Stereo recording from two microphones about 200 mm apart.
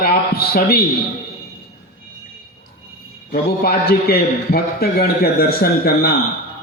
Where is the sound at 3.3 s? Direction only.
50° left (ahead or behind).